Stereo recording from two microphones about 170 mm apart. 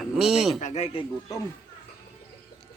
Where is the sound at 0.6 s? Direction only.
45° left (ahead or behind).